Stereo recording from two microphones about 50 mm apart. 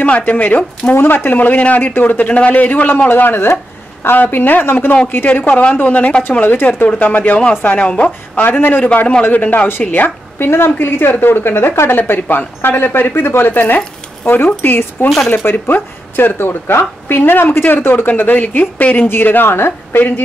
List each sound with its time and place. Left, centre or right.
0.2 s speech: left
0.9 s speech: left
3.1 s speech: left
10.5 s speech: left
12.0 s speech: left
19.0 s speech: left